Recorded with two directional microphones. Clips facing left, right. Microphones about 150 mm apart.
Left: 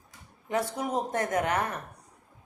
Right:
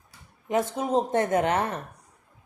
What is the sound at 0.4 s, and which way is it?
A woman's voice, 20° right (ahead or behind).